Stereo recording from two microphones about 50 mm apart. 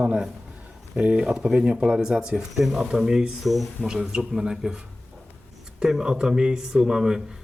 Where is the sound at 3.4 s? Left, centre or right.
Centre.